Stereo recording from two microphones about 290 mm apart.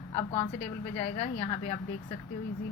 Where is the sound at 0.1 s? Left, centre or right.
Left.